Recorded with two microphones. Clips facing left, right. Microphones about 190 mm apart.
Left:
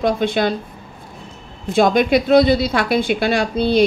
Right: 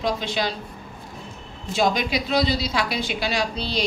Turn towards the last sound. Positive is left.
turn(degrees=55)  # may be behind; listen again after turning